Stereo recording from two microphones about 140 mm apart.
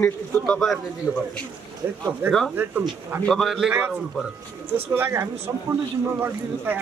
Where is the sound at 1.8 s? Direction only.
15° right (ahead or behind).